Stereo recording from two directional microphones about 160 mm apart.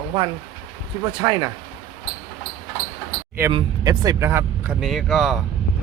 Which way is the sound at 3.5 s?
30° right (ahead or behind).